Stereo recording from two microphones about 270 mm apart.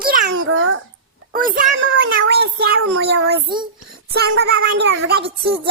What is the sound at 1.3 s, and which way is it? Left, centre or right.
A child's voice, right.